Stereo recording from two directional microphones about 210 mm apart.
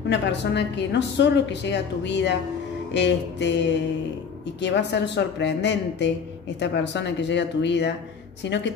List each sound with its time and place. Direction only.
0.1 s a woman's voice: 55° left (ahead or behind)